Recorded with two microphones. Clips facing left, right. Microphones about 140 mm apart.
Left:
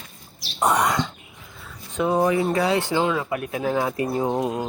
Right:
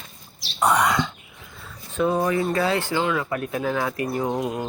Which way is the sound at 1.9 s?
20° left (ahead or behind).